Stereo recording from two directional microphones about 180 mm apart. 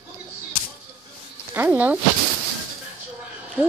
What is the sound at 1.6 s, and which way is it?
Speech, 10° right (ahead or behind).